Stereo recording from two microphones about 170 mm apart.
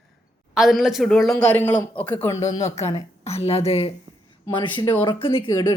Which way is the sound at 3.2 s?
40° left (ahead or behind).